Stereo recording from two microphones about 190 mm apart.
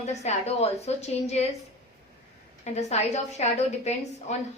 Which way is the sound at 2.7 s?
35° left (ahead or behind).